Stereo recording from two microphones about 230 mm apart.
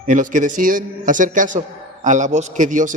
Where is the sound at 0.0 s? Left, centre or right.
Right.